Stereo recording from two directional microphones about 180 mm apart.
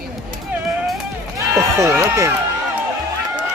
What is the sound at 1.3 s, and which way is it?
Run, 15° right (ahead or behind).